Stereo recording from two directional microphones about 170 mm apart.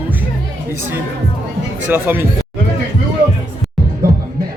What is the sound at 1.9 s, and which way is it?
Speech, 10° right (ahead or behind).